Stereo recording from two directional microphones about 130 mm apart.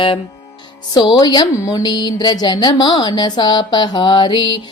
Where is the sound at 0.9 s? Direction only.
30° left (ahead or behind).